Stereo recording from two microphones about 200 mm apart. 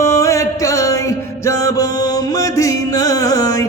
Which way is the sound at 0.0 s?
15° left (ahead or behind).